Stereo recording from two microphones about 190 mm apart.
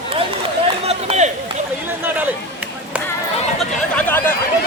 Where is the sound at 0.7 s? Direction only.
35° right (ahead or behind).